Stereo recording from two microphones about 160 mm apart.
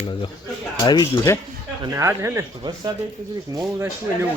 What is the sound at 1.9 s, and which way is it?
Speech, 20° right (ahead or behind).